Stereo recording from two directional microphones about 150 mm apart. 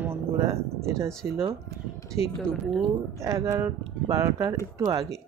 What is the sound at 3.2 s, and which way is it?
Speech, 20° right (ahead or behind).